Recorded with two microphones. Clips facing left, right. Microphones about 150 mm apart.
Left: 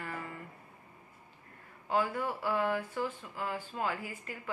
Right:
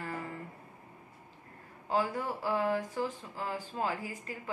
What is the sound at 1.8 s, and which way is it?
A woman's voice, 35° right (ahead or behind).